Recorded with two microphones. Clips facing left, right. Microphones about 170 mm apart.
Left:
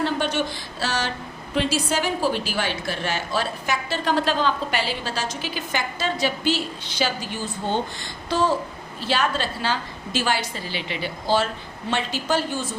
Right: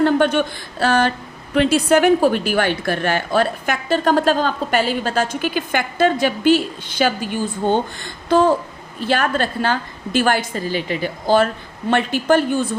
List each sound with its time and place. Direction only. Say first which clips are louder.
0.0 s a woman's voice: right 8 dB; 55° right (ahead or behind)